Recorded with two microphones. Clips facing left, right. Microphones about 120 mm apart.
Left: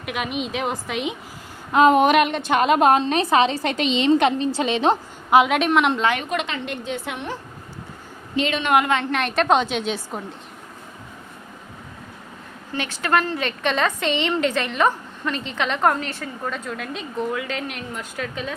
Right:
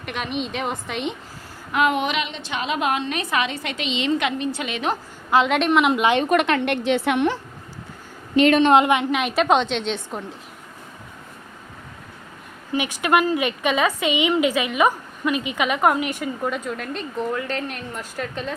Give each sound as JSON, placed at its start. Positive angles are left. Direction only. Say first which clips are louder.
{"t": 0.0, "sound": "a woman's voice", "louder": "left 1 dB", "side_deg": 5}
{"t": 1.7, "sound": "a woman's voice", "louder": "left 6 dB", "side_deg": 35}
{"t": 5.5, "sound": "a woman's voice", "louder": "right 1 dB", "side_deg": 0}
{"t": 6.2, "sound": "a woman's voice", "louder": "right 7 dB", "side_deg": -55}
{"t": 8.4, "sound": "a woman's voice", "louder": "right 8 dB", "side_deg": -50}
{"t": 8.6, "sound": "a woman's voice", "louder": "right 4 dB", "side_deg": -25}
{"t": 9.1, "sound": "a woman's voice", "louder": "even", "side_deg": -5}
{"t": 12.7, "sound": "a woman's voice", "louder": "right 2 dB", "side_deg": -10}
{"t": 16.7, "sound": "a woman's voice", "louder": "even", "side_deg": 0}